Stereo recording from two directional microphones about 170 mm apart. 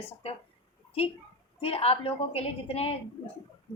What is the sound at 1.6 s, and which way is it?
Speech, 35° left (ahead or behind).